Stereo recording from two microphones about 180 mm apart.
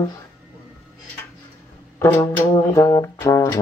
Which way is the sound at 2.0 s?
15° left (ahead or behind).